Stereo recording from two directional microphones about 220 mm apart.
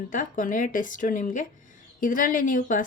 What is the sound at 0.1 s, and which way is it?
Speech, 35° left (ahead or behind).